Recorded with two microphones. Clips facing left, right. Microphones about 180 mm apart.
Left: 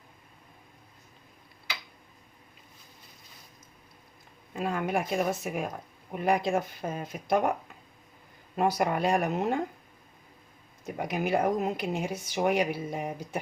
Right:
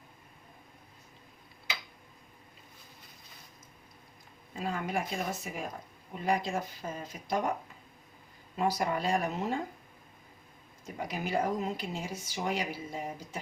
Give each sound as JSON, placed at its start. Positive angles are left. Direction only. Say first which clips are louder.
{"t": 4.5, "sound": "speech", "louder": "left 4 dB", "side_deg": 55}
{"t": 8.5, "sound": "speech", "louder": "left 4 dB", "side_deg": 55}
{"t": 10.8, "sound": "speech", "louder": "left 6 dB", "side_deg": 60}